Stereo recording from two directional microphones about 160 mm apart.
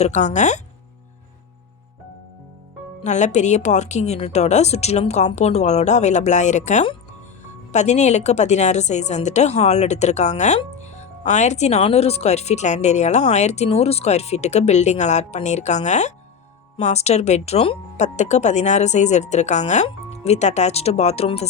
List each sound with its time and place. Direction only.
0.0 s a woman's voice: 45° left (ahead or behind)
3.0 s a woman's voice: 45° left (ahead or behind)